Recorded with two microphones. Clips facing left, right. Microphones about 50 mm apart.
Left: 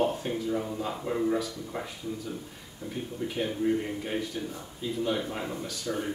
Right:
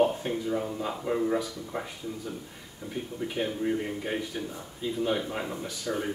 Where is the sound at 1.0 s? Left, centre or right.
Centre.